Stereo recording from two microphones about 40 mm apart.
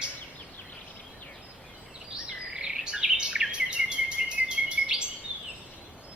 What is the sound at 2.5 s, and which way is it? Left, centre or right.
Bird vocalization, centre.